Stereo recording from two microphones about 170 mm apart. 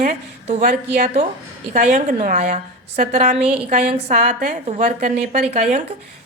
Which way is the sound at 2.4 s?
40° right (ahead or behind).